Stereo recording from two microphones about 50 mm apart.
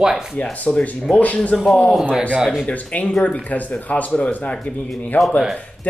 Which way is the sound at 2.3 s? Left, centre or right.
Centre.